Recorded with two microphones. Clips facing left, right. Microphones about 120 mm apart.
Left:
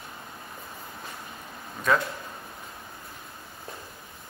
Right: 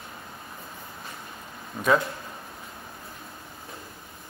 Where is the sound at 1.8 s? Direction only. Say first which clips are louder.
Right 2 dB; 25° right (ahead or behind).